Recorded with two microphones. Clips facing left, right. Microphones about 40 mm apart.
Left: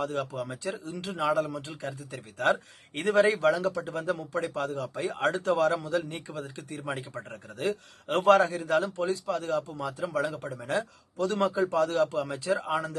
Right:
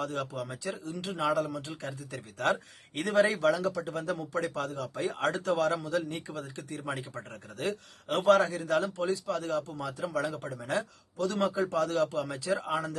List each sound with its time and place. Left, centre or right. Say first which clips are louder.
0.0 s speech: left 3 dB; left
1.2 s speech: left 2 dB; left